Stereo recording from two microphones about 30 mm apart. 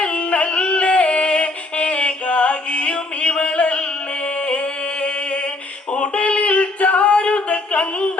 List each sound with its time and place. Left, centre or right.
0.0 s music: left
4.4 s a sound: left
5.9 s singing: left
7.4 s music: left